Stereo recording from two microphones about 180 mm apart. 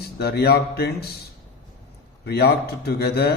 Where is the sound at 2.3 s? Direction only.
60° left (ahead or behind).